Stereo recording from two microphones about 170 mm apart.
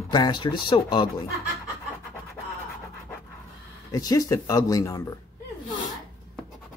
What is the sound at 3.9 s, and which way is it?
Speech, 20° left (ahead or behind).